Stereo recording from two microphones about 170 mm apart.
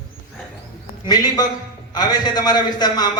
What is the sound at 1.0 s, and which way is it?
A man's voice, 25° left (ahead or behind).